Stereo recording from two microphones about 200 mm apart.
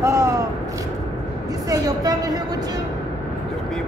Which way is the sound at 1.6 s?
20° right (ahead or behind).